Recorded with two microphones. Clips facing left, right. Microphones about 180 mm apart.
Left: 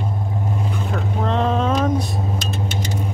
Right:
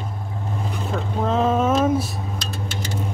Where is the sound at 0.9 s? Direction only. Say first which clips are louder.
Right 1 dB; 5° right (ahead or behind).